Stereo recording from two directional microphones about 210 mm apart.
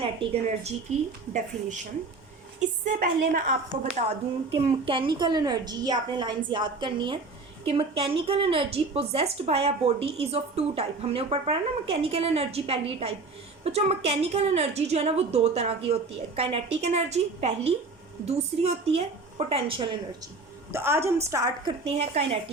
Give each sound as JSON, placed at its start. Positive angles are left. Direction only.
{"t": 0.0, "sound": "a woman's voice", "side_deg": -30}
{"t": 4.5, "sound": "a woman's voice", "side_deg": -25}
{"t": 20.7, "sound": "a woman's voice", "side_deg": -10}
{"t": 21.8, "sound": "a woman's voice", "side_deg": -30}